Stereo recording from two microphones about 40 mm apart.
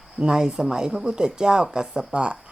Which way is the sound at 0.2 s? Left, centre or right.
Centre.